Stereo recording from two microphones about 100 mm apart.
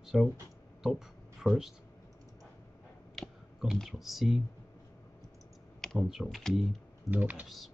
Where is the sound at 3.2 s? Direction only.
Centre (ahead or behind).